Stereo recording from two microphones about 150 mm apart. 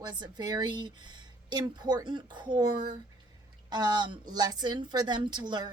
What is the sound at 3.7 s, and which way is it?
A woman's voice, 30° right (ahead or behind).